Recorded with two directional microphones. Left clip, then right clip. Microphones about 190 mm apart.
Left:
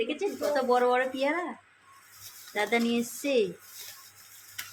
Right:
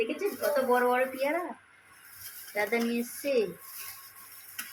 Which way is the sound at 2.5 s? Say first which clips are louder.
Left 2 dB; 30° left (ahead or behind).